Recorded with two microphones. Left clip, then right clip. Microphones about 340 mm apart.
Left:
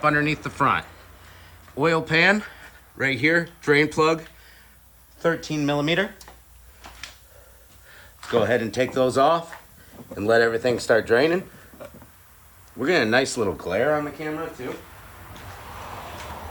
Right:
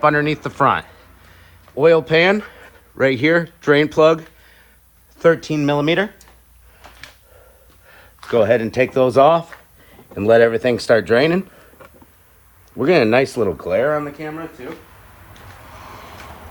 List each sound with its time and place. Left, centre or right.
0.0 s speech: centre
5.4 s speech: centre
7.9 s speech: centre
12.8 s speech: centre